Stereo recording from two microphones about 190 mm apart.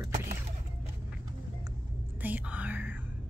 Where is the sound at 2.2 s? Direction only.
10° right (ahead or behind).